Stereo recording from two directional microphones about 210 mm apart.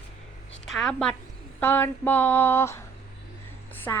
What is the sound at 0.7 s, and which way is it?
A woman's voice, 5° left (ahead or behind).